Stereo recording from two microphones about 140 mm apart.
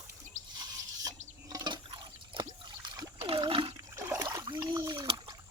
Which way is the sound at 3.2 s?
40° right (ahead or behind).